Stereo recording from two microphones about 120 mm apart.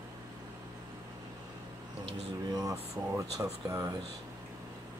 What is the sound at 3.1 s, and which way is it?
Speech, 25° right (ahead or behind).